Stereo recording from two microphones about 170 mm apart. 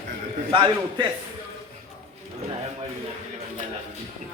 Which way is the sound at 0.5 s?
25° right (ahead or behind).